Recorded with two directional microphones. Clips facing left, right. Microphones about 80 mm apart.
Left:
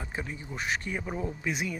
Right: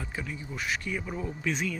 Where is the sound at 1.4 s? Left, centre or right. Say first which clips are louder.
Right 1 dB; centre.